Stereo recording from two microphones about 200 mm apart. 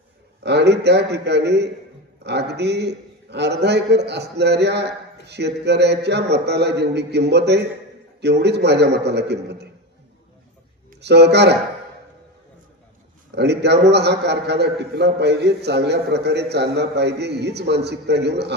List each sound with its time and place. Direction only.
0.4 s a man's voice: 60° right (ahead or behind)
11.0 s a man's voice: 55° right (ahead or behind)
13.3 s a man's voice: 55° right (ahead or behind)